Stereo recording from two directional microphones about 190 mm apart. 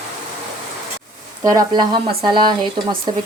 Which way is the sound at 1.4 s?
20° right (ahead or behind).